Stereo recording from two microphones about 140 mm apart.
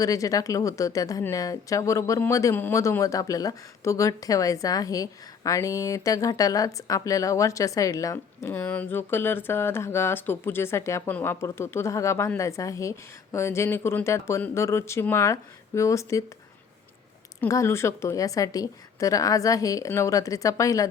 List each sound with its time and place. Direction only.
0.0 s a woman's voice: 25° left (ahead or behind)
17.5 s a woman's voice: 20° left (ahead or behind)